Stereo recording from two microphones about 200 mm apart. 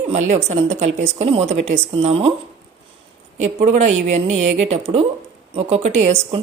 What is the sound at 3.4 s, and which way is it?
A woman's voice, 35° right (ahead or behind).